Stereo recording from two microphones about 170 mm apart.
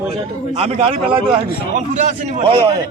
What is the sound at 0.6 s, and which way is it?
A man's voice, 35° right (ahead or behind).